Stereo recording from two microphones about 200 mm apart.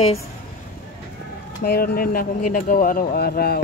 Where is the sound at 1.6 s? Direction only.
50° left (ahead or behind).